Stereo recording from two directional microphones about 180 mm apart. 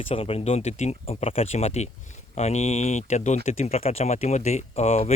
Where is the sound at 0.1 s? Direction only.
30° left (ahead or behind).